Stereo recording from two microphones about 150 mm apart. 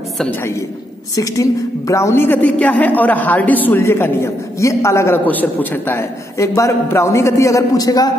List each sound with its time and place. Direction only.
0.2 s a woman's voice: 15° left (ahead or behind)